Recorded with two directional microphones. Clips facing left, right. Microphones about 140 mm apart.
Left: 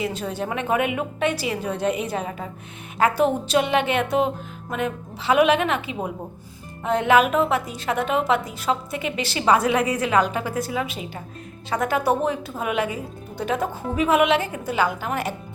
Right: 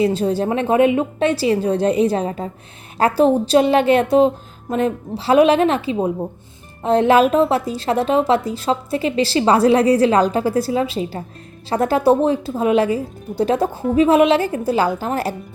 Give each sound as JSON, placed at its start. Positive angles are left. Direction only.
{"t": 0.0, "sound": "a woman's voice", "side_deg": -30}